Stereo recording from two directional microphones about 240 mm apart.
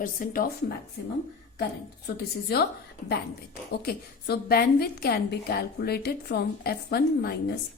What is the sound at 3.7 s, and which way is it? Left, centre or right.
A woman's voice, left.